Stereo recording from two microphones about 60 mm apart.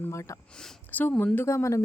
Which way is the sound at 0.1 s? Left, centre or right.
Left.